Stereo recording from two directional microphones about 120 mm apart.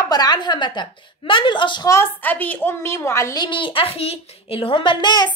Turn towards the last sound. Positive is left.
turn(degrees=35)  # may be behind; listen again after turning